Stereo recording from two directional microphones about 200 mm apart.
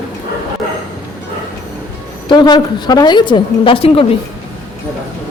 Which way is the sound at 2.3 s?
20° left (ahead or behind).